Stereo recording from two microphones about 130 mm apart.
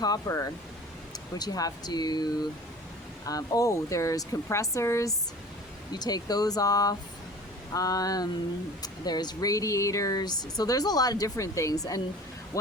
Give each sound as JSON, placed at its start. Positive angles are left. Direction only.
{"t": 0.0, "sound": "speech", "side_deg": 25}